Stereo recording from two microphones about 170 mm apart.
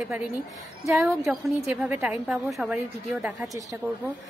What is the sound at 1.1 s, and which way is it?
A woman's voice, 15° right (ahead or behind).